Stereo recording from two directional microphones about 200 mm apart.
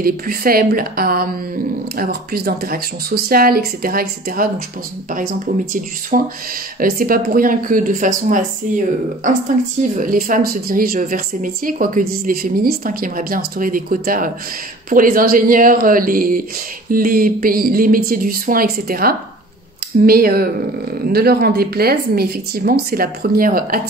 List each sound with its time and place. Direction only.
0.0 s a woman's voice: 45° right (ahead or behind)